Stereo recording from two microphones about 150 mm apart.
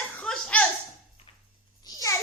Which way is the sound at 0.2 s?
5° left (ahead or behind).